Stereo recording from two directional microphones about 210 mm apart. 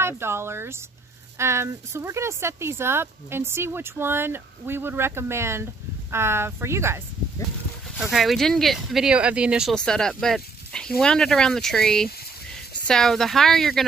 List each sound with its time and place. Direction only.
0.0 s speech: 10° right (ahead or behind)
8.0 s speech: centre (ahead or behind)